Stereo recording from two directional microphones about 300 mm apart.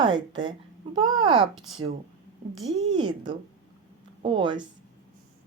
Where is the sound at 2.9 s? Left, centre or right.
Centre.